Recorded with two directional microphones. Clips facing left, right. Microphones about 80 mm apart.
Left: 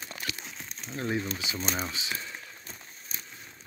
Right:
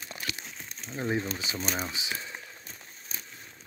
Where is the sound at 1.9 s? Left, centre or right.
Centre.